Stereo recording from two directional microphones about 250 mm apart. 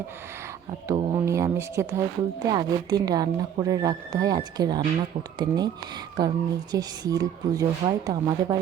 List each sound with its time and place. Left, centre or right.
0.9 s a woman's voice: centre